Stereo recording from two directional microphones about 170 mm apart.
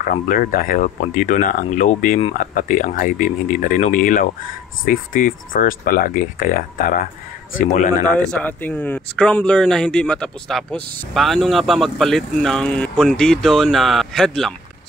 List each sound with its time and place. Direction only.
0.1 s speech: 55° left (ahead or behind)
8.2 s speech: 5° left (ahead or behind)